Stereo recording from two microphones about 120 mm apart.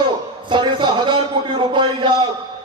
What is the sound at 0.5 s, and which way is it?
A man's voice, 40° right (ahead or behind).